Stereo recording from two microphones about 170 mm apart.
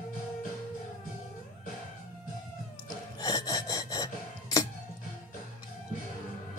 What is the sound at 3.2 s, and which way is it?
Gasp, 20° left (ahead or behind).